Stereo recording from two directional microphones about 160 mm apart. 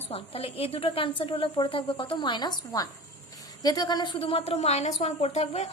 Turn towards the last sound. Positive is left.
turn(degrees=40)  # may be behind; listen again after turning